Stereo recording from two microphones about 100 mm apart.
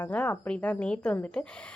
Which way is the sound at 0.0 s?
20° left (ahead or behind).